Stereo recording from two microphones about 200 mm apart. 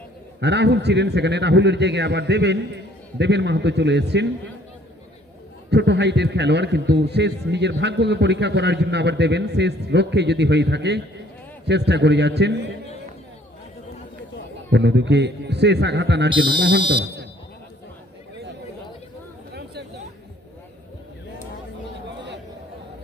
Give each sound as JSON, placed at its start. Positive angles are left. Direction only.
{"t": 0.3, "sound": "a man's voice", "side_deg": -60}
{"t": 5.7, "sound": "a man's voice", "side_deg": -60}
{"t": 14.7, "sound": "a man's voice", "side_deg": -60}